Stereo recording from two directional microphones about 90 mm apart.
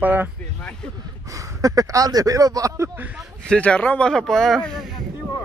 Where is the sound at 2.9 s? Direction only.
15° right (ahead or behind).